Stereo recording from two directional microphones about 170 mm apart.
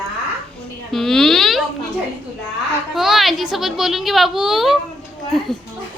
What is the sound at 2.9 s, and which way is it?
A woman's voice, centre (ahead or behind).